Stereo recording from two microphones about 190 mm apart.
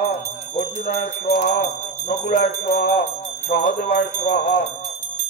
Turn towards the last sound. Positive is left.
turn(degrees=40)  # may be behind; listen again after turning